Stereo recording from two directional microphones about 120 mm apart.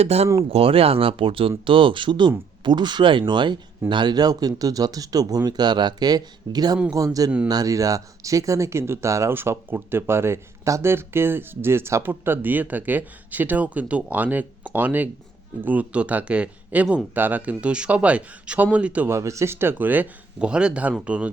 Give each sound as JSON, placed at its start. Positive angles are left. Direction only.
{"t": 0.0, "sound": "speech", "side_deg": -65}
{"t": 0.3, "sound": "speech", "side_deg": -50}
{"t": 19.1, "sound": "speech", "side_deg": -25}